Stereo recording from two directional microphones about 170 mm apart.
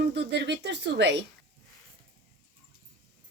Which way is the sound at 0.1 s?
90° right.